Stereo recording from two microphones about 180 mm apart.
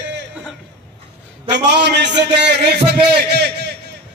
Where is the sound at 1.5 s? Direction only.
70° right (ahead or behind).